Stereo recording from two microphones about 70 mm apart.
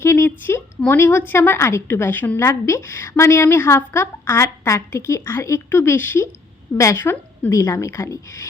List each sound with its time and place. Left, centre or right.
0.0 s a sound: left
0.3 s a woman's voice: left
2.5 s a woman's voice: left
7.5 s a woman's voice: left